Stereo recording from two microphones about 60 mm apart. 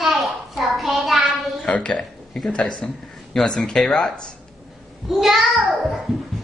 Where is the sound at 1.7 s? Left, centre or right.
Centre.